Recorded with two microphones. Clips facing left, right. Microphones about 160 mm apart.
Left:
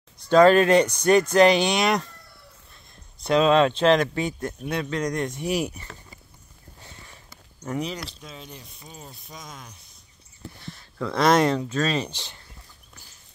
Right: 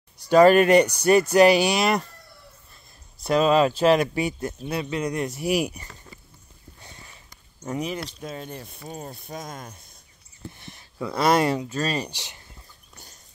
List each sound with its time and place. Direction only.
0.3 s speech: 10° right (ahead or behind)
7.6 s speech: 20° right (ahead or behind)
8.2 s mechanisms: 50° right (ahead or behind)
10.6 s a sound: 15° right (ahead or behind)
11.1 s speech: 5° right (ahead or behind)